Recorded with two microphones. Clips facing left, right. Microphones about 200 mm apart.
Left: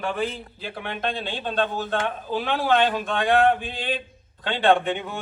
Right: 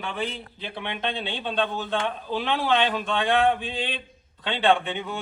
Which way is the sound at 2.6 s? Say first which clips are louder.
Left 3 dB; 45° left (ahead or behind).